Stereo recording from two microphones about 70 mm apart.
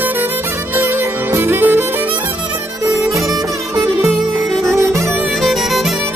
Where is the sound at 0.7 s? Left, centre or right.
Right.